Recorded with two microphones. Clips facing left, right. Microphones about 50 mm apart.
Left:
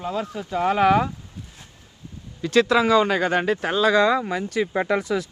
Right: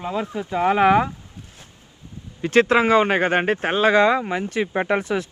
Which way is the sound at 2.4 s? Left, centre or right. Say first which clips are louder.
Right 2 dB; right.